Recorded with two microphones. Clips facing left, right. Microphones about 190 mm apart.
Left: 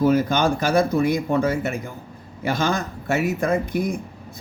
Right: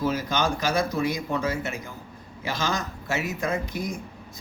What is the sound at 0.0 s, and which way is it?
A man's voice, 55° left (ahead or behind).